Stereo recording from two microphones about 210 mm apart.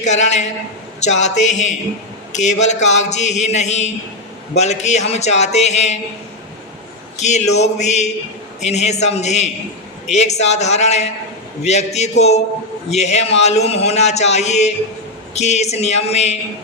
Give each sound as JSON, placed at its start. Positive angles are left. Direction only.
{"t": 0.0, "sound": "a man's voice", "side_deg": 35}
{"t": 7.2, "sound": "a man's voice", "side_deg": 35}